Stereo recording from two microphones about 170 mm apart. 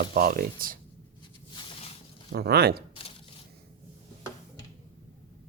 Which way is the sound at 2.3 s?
70° right (ahead or behind).